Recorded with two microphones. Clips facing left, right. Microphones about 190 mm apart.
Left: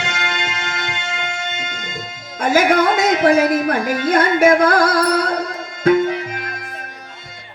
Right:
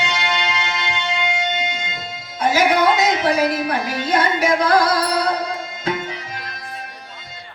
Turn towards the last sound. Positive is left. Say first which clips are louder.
# left 3 dB
turn(degrees=50)  # may be behind; listen again after turning